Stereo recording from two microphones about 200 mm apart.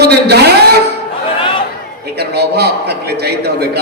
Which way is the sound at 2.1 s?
55° right (ahead or behind).